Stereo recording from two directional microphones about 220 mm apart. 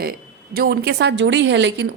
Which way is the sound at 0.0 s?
45° right (ahead or behind).